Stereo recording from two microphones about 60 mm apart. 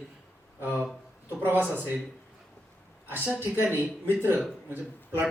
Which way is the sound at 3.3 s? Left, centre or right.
Right.